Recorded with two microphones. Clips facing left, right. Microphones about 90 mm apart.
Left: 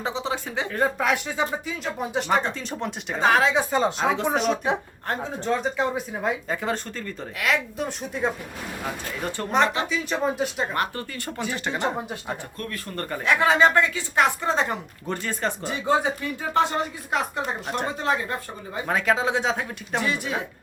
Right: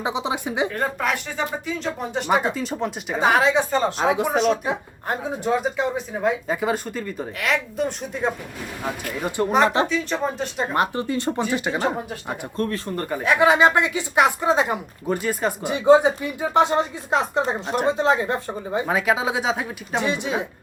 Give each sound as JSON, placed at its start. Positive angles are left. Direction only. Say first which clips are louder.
{"t": 0.0, "sound": "speech", "louder": "right 3 dB", "side_deg": -15}
{"t": 0.7, "sound": "speech", "louder": "left 1 dB", "side_deg": 5}
{"t": 3.5, "sound": "speech", "louder": "right 2 dB", "side_deg": 0}
{"t": 4.0, "sound": "speech", "louder": "right 3 dB", "side_deg": -10}
{"t": 7.4, "sound": "speech", "louder": "right 2 dB", "side_deg": 0}
{"t": 9.6, "sound": "speech", "louder": "right 6 dB", "side_deg": -30}
{"t": 9.9, "sound": "speech", "louder": "right 1 dB", "side_deg": 5}
{"t": 10.7, "sound": "speech", "louder": "right 5 dB", "side_deg": -20}
{"t": 12.5, "sound": "speech", "louder": "right 9 dB", "side_deg": -30}
{"t": 13.0, "sound": "speech", "louder": "right 3 dB", "side_deg": -10}
{"t": 18.9, "sound": "speech", "louder": "left 1 dB", "side_deg": -5}
{"t": 20.0, "sound": "speech", "louder": "right 3 dB", "side_deg": -20}